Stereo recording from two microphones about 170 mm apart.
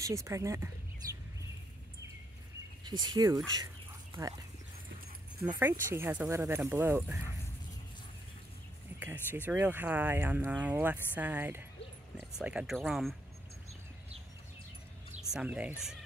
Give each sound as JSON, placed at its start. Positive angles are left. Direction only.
{"t": 0.0, "sound": "speech", "side_deg": -20}
{"t": 2.8, "sound": "speech", "side_deg": -25}
{"t": 3.6, "sound": "fowl", "side_deg": -15}
{"t": 5.4, "sound": "speech", "side_deg": -15}
{"t": 9.0, "sound": "speech", "side_deg": -10}
{"t": 15.3, "sound": "speech", "side_deg": -5}